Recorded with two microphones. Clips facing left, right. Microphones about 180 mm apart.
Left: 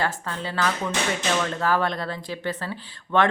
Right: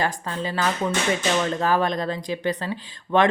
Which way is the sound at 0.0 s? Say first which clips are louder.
Right 2 dB; 15° right (ahead or behind).